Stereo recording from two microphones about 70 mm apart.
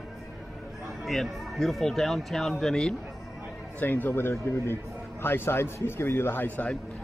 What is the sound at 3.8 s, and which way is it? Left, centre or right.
Speech, left.